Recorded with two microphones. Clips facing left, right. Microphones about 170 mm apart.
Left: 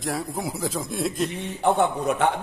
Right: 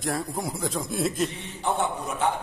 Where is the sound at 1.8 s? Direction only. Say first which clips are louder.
Left 6 dB; 60° left (ahead or behind).